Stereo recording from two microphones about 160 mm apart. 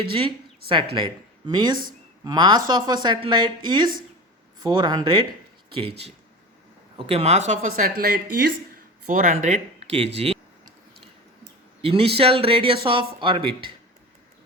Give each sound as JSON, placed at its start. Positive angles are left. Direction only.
{"t": 0.0, "sound": "speech", "side_deg": -35}
{"t": 6.9, "sound": "speech", "side_deg": -40}
{"t": 9.0, "sound": "speech", "side_deg": -55}
{"t": 11.8, "sound": "speech", "side_deg": -35}